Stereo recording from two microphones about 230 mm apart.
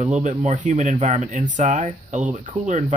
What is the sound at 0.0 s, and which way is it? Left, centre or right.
Speech, right.